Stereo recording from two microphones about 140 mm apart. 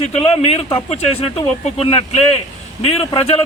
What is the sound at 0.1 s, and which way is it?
A man's voice, 45° left (ahead or behind).